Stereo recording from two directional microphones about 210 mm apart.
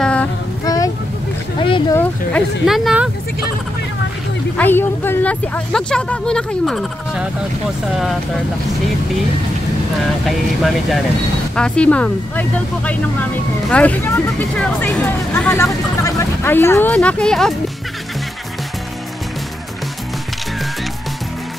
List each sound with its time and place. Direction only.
0.0 s child singing: 5° left (ahead or behind)
0.7 s vehicle: 15° left (ahead or behind)
1.6 s a sound: 25° left (ahead or behind)
2.6 s speech: centre (ahead or behind)
4.6 s speech: 10° left (ahead or behind)
10.2 s speech: centre (ahead or behind)